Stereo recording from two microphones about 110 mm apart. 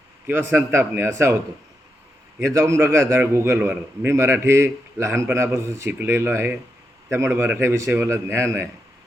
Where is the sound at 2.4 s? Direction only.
25° right (ahead or behind).